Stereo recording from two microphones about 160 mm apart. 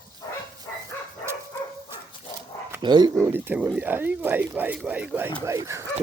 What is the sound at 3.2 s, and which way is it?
Speech, 15° right (ahead or behind).